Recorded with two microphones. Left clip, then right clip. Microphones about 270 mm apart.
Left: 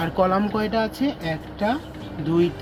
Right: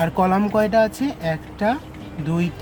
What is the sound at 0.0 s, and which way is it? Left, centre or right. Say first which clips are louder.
Speech: right 2 dB; right.